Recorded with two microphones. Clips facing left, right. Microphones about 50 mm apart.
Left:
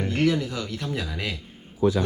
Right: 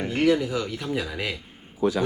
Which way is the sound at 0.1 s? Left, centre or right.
Centre.